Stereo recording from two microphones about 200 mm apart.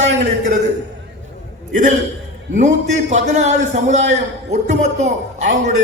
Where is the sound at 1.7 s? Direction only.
40° right (ahead or behind).